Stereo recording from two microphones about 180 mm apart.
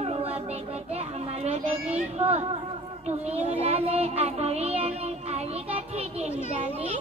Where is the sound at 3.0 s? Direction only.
35° right (ahead or behind).